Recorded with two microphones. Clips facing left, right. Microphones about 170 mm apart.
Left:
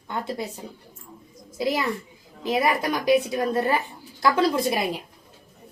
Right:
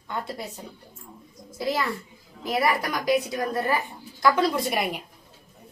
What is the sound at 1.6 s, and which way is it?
A child's voice, 15° left (ahead or behind).